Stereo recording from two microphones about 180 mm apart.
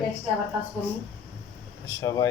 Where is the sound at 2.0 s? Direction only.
20° left (ahead or behind).